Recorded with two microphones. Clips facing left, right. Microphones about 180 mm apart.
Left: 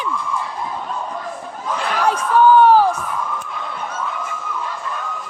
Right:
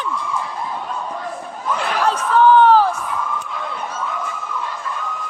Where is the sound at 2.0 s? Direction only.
10° left (ahead or behind).